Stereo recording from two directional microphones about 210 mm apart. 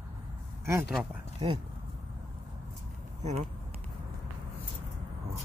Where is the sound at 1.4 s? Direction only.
20° right (ahead or behind).